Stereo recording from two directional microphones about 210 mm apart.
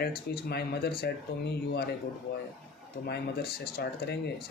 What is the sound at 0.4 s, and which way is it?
Speech, 50° left (ahead or behind).